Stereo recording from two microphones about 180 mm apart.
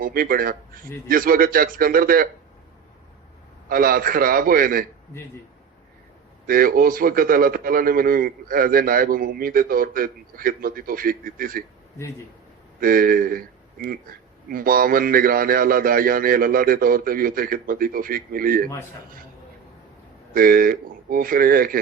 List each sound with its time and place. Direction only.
0.0 s a man's voice: 55° right (ahead or behind)
3.7 s a man's voice: 55° right (ahead or behind)
6.5 s a man's voice: 55° right (ahead or behind)
12.8 s a man's voice: 55° right (ahead or behind)
20.3 s a man's voice: 55° right (ahead or behind)